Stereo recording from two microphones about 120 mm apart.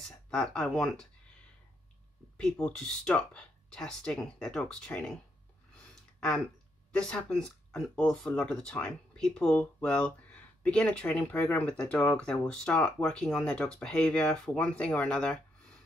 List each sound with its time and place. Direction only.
0.0 s speech: 5° left (ahead or behind)
2.6 s speech: 5° left (ahead or behind)
5.8 s a sound: 10° left (ahead or behind)
6.9 s speech: 10° left (ahead or behind)